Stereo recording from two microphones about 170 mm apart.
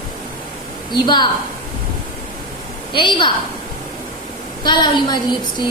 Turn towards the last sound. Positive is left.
turn(degrees=25)  # may be behind; listen again after turning